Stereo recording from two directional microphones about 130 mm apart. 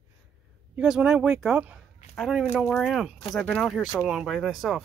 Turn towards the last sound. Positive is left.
turn(degrees=0)  # may be behind; listen again after turning